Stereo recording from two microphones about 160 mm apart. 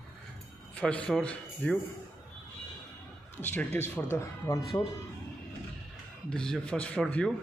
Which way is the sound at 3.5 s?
15° left (ahead or behind).